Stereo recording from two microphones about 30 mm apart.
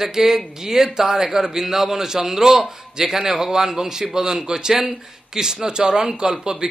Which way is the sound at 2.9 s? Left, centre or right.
Right.